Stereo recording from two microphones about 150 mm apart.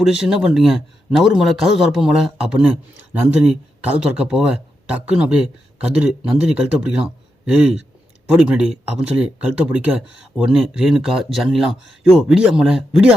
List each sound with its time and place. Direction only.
0.0 s a man's voice: 5° right (ahead or behind)